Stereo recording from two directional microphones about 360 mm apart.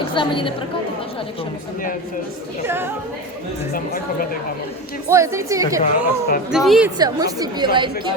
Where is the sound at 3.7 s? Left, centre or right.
Left.